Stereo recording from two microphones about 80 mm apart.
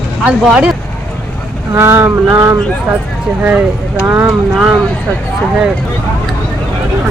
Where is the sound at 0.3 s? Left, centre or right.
Centre.